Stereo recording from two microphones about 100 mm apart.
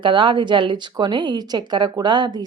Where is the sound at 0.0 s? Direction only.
55° right (ahead or behind).